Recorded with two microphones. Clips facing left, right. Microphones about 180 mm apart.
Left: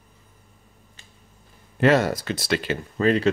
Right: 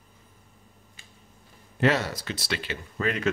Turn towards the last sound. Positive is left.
turn(degrees=35)  # may be behind; listen again after turning